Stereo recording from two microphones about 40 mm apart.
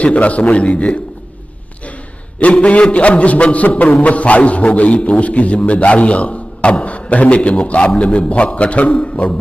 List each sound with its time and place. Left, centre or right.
0.0 s a man's voice: left
2.5 s a man's voice: left